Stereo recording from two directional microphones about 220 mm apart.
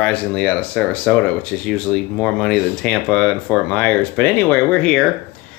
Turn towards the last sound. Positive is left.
turn(degrees=5)  # may be behind; listen again after turning